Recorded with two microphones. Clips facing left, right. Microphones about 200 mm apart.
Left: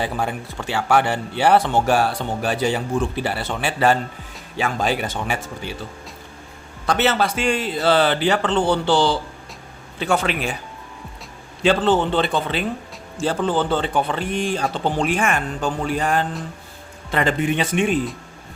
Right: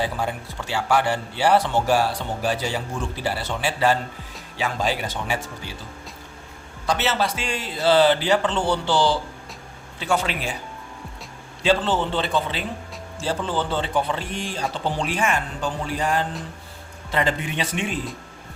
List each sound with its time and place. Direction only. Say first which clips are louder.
0.0 s speech: left 2 dB; 55° left (ahead or behind)
6.8 s speech: left 4 dB; 55° left (ahead or behind)
11.6 s speech: left 4 dB; 55° left (ahead or behind)